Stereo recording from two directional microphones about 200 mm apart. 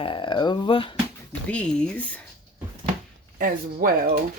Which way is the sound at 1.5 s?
5° left (ahead or behind).